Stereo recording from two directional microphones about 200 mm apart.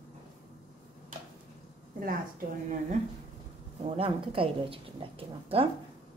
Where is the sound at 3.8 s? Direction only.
30° right (ahead or behind).